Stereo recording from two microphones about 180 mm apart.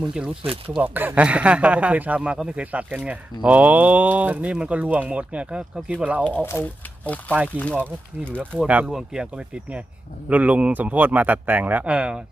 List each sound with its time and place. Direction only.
0.4 s speech: 30° right (ahead or behind)
0.8 s speech: 10° right (ahead or behind)
6.2 s speech: 10° left (ahead or behind)
8.4 s speech: 10° right (ahead or behind)